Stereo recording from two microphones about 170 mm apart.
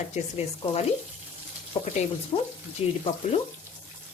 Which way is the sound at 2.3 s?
30° left (ahead or behind).